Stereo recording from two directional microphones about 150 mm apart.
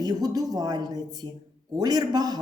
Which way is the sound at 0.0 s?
25° right (ahead or behind).